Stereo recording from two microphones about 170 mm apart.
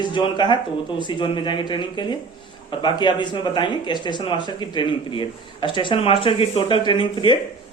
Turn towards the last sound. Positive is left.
turn(degrees=30)  # may be behind; listen again after turning